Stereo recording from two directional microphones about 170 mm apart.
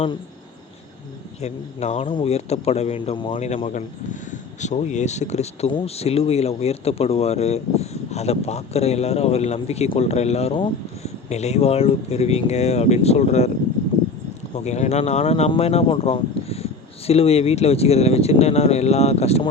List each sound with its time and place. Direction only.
1.4 s a man's voice: 40° left (ahead or behind)
14.5 s a man's voice: 40° left (ahead or behind)